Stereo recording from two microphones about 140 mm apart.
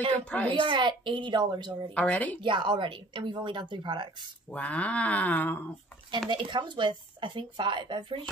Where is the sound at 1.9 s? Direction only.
10° left (ahead or behind).